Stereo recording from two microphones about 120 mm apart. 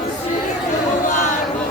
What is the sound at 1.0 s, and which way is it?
Choir, 90° left.